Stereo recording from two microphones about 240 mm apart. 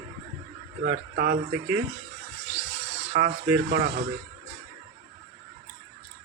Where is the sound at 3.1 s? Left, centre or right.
Right.